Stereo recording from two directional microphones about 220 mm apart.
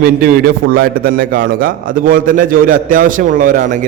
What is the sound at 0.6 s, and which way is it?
A man's voice, 40° right (ahead or behind).